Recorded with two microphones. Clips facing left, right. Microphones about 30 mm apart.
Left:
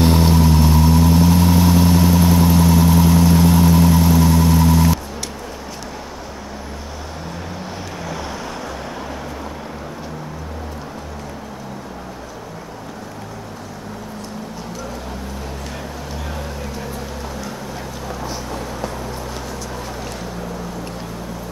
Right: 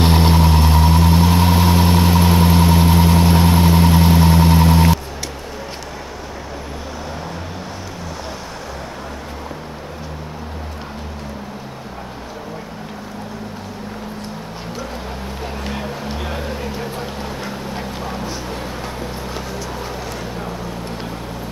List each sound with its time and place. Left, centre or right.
0.0 s vehicle: right
15.6 s music: right
16.9 s boat: right